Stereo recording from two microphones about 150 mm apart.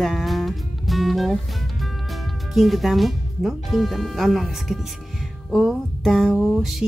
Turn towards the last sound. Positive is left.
turn(degrees=0)  # may be behind; listen again after turning